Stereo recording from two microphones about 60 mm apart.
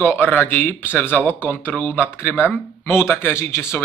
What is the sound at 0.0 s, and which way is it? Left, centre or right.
Speech, left.